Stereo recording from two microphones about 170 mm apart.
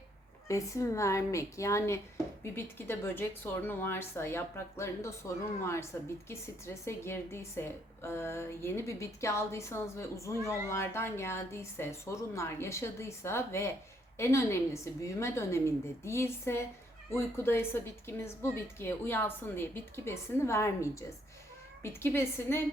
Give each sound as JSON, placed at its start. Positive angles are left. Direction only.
{"t": 0.4, "sound": "a woman's voice", "side_deg": 20}